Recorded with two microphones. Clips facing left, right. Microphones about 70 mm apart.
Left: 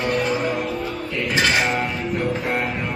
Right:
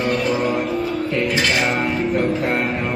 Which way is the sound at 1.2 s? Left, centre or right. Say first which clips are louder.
Left 3 dB; left.